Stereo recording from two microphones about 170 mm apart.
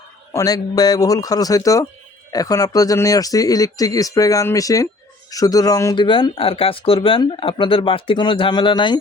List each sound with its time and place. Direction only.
0.3 s speech: 20° left (ahead or behind)